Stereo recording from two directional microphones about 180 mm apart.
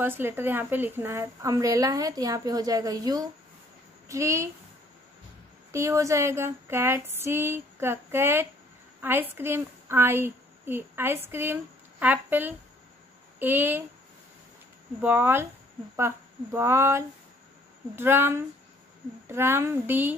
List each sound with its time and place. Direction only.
0.0 s a woman's voice: 10° right (ahead or behind)
4.1 s female singing: 15° right (ahead or behind)
5.7 s female singing: 15° right (ahead or behind)
9.0 s a woman's voice: 10° right (ahead or behind)
13.4 s female singing: 10° right (ahead or behind)
15.0 s female singing: 10° right (ahead or behind)
16.5 s female singing: 15° right (ahead or behind)